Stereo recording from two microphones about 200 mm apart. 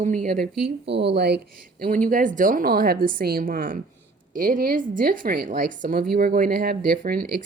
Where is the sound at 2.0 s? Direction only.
40° right (ahead or behind).